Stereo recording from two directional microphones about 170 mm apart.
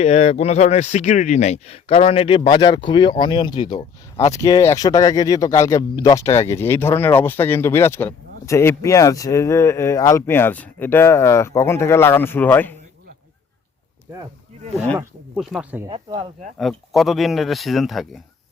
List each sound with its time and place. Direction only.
0.0 s speech: 40° left (ahead or behind); by 12.7 s 10° left (ahead or behind)
15.4 s speech: centre (ahead or behind)
15.9 s speech: 30° right (ahead or behind)
16.6 s speech: centre (ahead or behind)